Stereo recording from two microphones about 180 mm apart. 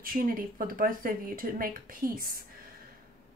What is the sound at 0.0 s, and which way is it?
A woman's voice, 50° right (ahead or behind).